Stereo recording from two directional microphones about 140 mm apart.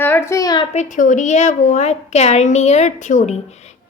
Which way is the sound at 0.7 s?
65° left (ahead or behind).